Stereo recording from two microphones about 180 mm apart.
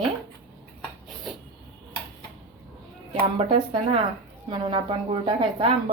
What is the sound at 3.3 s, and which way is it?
A woman's voice, 30° right (ahead or behind).